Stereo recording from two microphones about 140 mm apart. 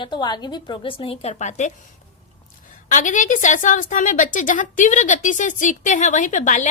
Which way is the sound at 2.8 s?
65° left (ahead or behind).